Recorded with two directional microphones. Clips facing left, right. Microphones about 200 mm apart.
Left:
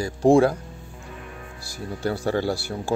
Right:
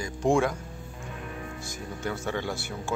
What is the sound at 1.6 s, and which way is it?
Speech, 35° left (ahead or behind).